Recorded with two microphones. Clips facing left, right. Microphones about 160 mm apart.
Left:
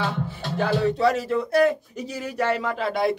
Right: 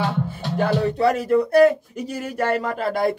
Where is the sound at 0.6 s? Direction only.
60° right (ahead or behind).